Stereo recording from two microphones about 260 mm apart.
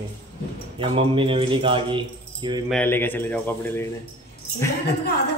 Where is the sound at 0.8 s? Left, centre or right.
Centre.